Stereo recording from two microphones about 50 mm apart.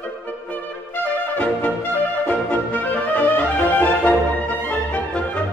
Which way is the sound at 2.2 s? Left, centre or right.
Left.